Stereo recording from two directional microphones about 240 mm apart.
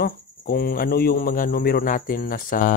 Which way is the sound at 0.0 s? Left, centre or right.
Left.